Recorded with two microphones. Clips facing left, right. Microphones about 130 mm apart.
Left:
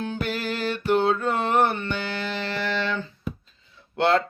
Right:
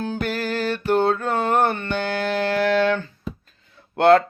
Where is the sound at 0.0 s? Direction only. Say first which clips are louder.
Right 3 dB; 40° right (ahead or behind).